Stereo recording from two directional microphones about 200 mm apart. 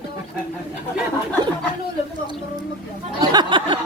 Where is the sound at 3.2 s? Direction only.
20° right (ahead or behind).